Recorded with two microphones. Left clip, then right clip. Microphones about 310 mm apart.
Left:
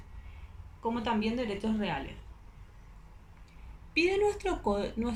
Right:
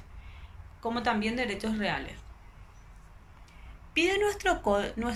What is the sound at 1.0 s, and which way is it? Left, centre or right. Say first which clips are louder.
Speech: right 4 dB; centre.